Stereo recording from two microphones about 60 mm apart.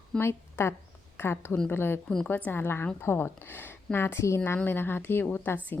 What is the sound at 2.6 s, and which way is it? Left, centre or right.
A woman's voice, left.